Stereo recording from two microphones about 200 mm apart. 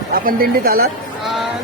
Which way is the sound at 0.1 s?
45° right (ahead or behind).